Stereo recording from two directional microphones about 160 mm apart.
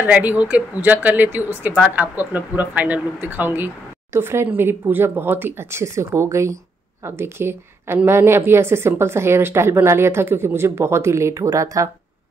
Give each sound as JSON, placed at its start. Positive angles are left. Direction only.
{"t": 0.0, "sound": "speech", "side_deg": -10}